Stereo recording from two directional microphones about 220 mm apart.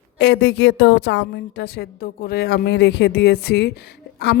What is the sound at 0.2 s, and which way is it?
Speech, 50° left (ahead or behind).